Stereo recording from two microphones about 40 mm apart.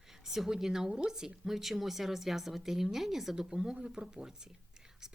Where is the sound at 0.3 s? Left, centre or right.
Centre.